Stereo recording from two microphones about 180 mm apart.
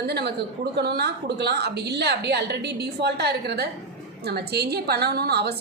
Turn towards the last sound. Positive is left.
turn(degrees=-65)  # may be behind; listen again after turning